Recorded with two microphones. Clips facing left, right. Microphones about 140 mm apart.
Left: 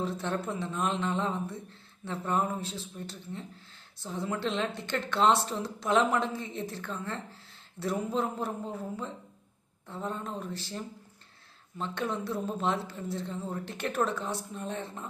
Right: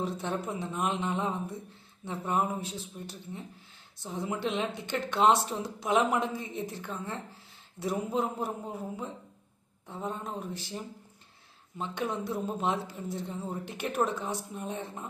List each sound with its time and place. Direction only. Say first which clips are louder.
0.0 s a man's voice: left 1 dB; 15° right (ahead or behind)